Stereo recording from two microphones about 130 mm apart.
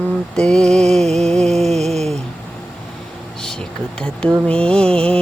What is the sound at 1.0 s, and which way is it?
Music, 55° right (ahead or behind).